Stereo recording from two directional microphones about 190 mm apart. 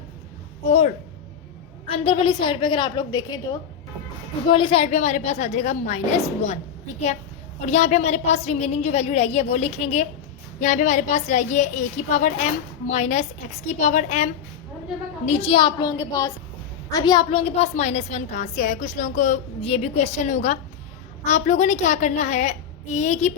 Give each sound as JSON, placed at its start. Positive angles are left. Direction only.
{"t": 0.6, "sound": "speech", "side_deg": 35}
{"t": 1.9, "sound": "a woman's voice", "side_deg": 30}
{"t": 4.4, "sound": "a woman's voice", "side_deg": 25}
{"t": 7.6, "sound": "a woman's voice", "side_deg": 35}
{"t": 15.3, "sound": "a woman's voice", "side_deg": 30}